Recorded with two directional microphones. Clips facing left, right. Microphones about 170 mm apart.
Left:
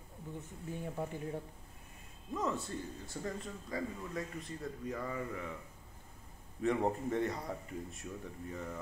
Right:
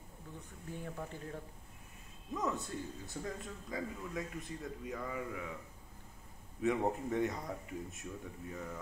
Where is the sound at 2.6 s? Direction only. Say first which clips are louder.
Even; centre (ahead or behind).